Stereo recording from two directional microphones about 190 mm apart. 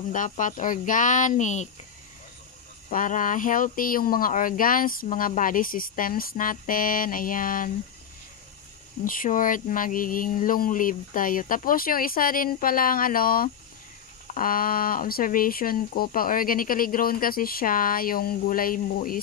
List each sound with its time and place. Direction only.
0.1 s speech: 45° left (ahead or behind)
2.9 s speech: 45° left (ahead or behind)
9.0 s speech: 45° left (ahead or behind)